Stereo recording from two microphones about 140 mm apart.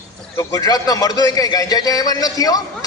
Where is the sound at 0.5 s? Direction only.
25° left (ahead or behind).